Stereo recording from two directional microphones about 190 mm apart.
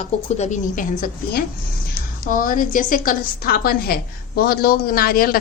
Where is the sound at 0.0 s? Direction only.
40° left (ahead or behind).